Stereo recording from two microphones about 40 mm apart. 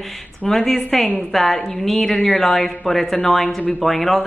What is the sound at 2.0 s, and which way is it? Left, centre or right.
Speech, centre.